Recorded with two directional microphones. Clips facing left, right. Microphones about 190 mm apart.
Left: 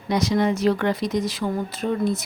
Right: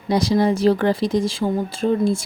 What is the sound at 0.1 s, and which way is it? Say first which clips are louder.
Speech: right 3 dB; 30° right (ahead or behind).